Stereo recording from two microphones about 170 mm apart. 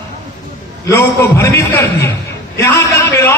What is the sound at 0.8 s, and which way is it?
A man's voice, 15° left (ahead or behind).